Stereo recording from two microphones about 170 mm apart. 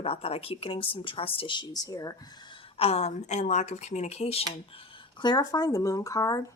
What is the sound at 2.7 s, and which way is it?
Speech, 35° left (ahead or behind).